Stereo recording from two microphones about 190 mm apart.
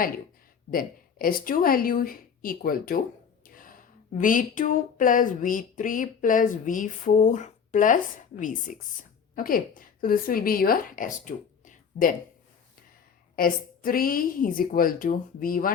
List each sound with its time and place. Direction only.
0.7 s a woman's voice: 50° left (ahead or behind)
13.3 s a woman's voice: 50° left (ahead or behind)